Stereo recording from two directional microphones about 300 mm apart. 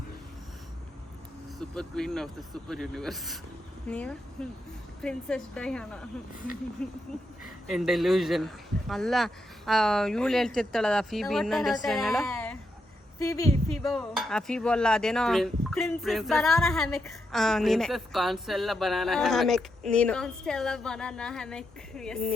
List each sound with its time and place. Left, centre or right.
1.5 s speech: centre